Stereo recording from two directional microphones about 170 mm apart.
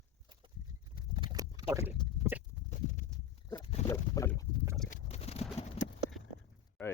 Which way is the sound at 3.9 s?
15° left (ahead or behind).